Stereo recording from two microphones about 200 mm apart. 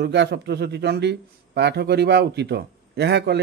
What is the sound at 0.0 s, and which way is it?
A man's voice, 55° right (ahead or behind).